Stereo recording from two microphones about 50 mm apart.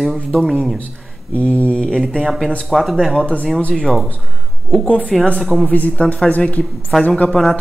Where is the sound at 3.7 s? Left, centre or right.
Centre.